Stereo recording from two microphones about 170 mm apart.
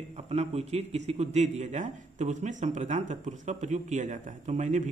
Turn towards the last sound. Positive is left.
turn(degrees=-45)  # may be behind; listen again after turning